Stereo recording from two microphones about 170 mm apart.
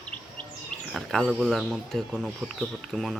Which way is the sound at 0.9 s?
Centre (ahead or behind).